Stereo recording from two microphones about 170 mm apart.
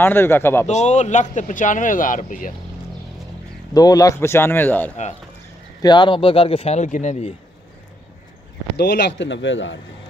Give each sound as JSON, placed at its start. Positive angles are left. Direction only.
{"t": 0.0, "sound": "a man's voice", "side_deg": 15}
{"t": 0.7, "sound": "speech", "side_deg": 40}
{"t": 3.7, "sound": "a man's voice", "side_deg": 20}
{"t": 5.8, "sound": "speech", "side_deg": 25}
{"t": 8.7, "sound": "speech", "side_deg": 75}